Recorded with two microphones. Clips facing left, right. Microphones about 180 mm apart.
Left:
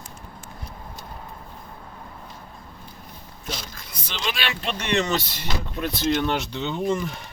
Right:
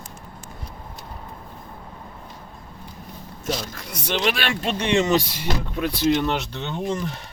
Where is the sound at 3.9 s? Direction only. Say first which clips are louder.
Right 8 dB; 65° right (ahead or behind); by 4.6 s 45° right (ahead or behind).